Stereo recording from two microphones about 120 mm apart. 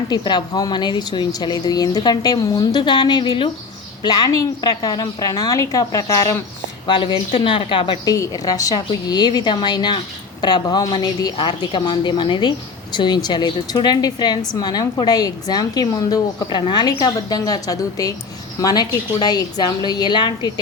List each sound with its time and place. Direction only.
0.1 s a woman's voice: 35° left (ahead or behind)
6.8 s speech: 45° left (ahead or behind)
8.0 s a woman's voice: 30° left (ahead or behind)